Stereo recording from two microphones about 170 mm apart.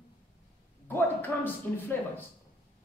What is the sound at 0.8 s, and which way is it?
A man's voice, 10° left (ahead or behind).